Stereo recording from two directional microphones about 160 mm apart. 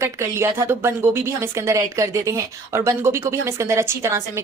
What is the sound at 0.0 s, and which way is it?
A woman's voice, 15° right (ahead or behind).